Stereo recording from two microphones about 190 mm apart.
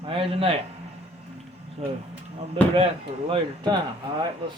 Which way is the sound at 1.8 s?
30° right (ahead or behind).